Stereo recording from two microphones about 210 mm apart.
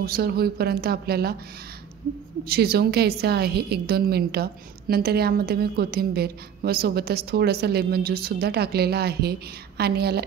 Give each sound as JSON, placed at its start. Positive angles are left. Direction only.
{"t": 0.0, "sound": "a woman's voice", "side_deg": -45}
{"t": 2.4, "sound": "a woman's voice", "side_deg": -50}